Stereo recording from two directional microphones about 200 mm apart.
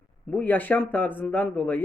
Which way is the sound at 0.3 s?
10° left (ahead or behind).